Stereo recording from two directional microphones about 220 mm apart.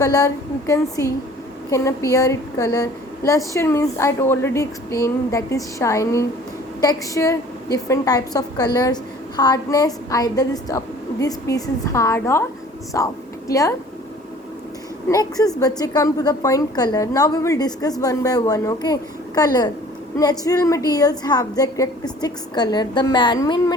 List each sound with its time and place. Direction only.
0.0 s a woman's voice: 15° left (ahead or behind)
15.1 s a woman's voice: 15° left (ahead or behind)